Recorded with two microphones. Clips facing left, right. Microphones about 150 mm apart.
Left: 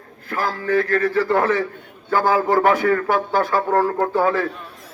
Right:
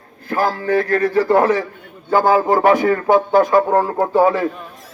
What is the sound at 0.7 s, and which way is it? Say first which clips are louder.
Speech: even; 35° right (ahead or behind).